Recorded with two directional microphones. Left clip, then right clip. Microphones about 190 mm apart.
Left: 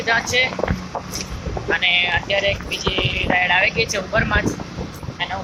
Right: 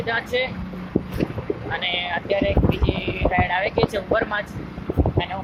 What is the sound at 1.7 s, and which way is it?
Speech, 5° right (ahead or behind).